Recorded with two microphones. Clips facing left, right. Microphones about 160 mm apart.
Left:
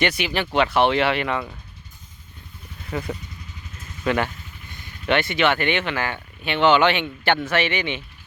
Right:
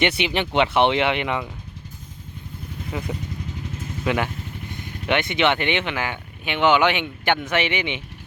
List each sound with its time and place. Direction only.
0.0 s speech: 25° right (ahead or behind)
2.9 s speech: 10° right (ahead or behind)